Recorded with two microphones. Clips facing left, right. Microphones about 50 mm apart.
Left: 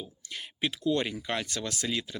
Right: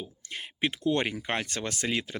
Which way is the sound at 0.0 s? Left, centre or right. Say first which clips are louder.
Right 2 dB; right.